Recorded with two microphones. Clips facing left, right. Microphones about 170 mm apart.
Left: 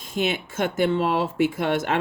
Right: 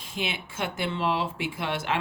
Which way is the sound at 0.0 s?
45° left (ahead or behind).